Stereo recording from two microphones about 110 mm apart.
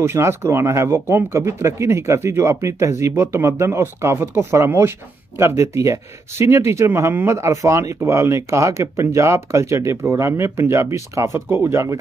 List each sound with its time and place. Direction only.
0.0 s speech: 25° right (ahead or behind)